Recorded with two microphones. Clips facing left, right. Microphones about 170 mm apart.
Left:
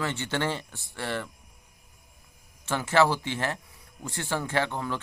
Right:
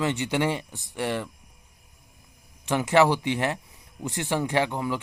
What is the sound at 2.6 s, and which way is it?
Speech, 15° right (ahead or behind).